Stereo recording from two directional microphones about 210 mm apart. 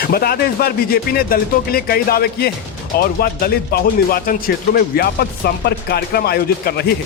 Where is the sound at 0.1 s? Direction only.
45° left (ahead or behind).